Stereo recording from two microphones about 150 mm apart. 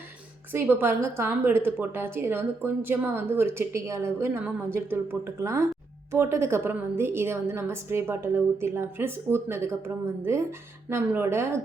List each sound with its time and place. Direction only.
0.5 s a woman's voice: 15° right (ahead or behind)